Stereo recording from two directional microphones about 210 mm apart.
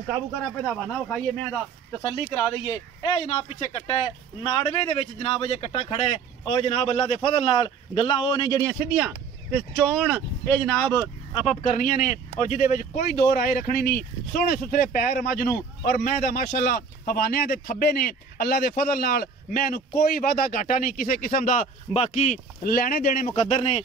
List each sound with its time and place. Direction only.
0.7 s speech: 5° left (ahead or behind)
2.6 s speech: 20° left (ahead or behind)
8.6 s speech: 5° right (ahead or behind)
11.3 s speech: 35° left (ahead or behind)
23.5 s speech: 30° left (ahead or behind)